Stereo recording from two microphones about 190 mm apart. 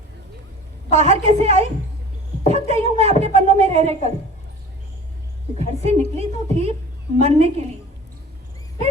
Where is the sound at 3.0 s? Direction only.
35° right (ahead or behind).